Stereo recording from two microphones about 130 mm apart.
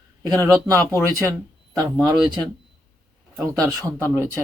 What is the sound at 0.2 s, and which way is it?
Speech, 25° right (ahead or behind).